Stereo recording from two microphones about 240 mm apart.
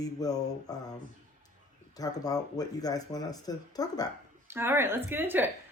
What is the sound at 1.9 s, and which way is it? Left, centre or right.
Speech, centre.